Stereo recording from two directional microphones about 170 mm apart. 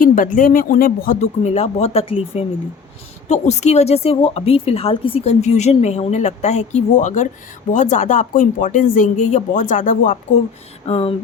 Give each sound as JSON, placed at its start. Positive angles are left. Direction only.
{"t": 0.0, "sound": "speech", "side_deg": 55}
{"t": 10.8, "sound": "speech", "side_deg": 35}